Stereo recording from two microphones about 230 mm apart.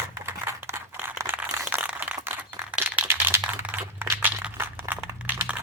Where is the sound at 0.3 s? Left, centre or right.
Centre.